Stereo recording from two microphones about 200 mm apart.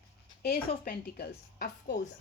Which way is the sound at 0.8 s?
50° left (ahead or behind).